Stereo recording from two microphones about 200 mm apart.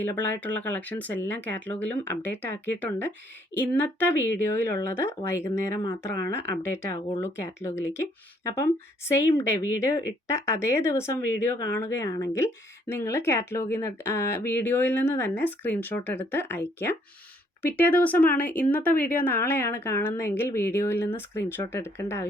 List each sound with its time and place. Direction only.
0.0 s speech: 10° left (ahead or behind)
9.4 s speech: 15° left (ahead or behind)